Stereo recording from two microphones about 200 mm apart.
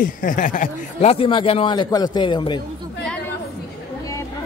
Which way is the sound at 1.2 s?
25° left (ahead or behind).